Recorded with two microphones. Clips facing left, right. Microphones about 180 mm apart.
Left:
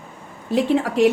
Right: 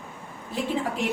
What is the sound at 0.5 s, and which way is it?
Speech, 75° left (ahead or behind).